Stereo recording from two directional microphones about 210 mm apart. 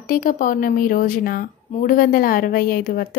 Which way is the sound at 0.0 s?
45° left (ahead or behind).